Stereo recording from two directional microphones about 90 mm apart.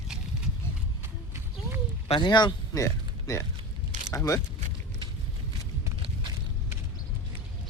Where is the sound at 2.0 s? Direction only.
75° left (ahead or behind); by 2.5 s 55° left (ahead or behind).